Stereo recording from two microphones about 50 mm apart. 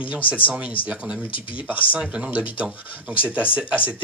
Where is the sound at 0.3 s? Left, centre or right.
Right.